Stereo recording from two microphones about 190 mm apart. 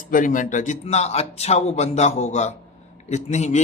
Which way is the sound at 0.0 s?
45° left (ahead or behind).